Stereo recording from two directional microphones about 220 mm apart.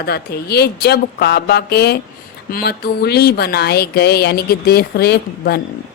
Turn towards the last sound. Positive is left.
turn(degrees=45)  # may be behind; listen again after turning